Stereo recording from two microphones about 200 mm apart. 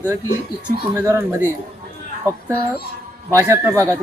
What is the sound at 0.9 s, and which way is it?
Speech, 15° right (ahead or behind).